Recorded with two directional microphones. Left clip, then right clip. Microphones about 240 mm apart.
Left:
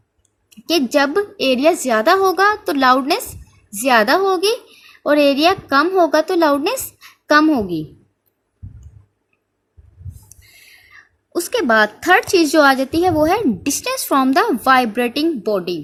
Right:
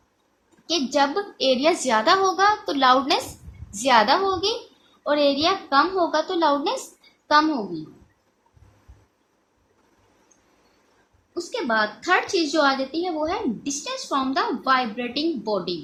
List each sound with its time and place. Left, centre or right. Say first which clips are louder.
0.7 s a woman's voice: left 6 dB; left
11.3 s a woman's voice: left 9 dB; left